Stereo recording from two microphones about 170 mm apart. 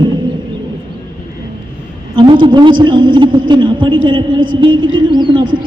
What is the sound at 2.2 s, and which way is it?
A man's voice, 30° right (ahead or behind).